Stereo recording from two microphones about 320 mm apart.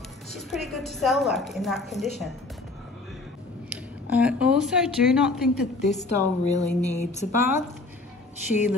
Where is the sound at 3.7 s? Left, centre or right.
Centre.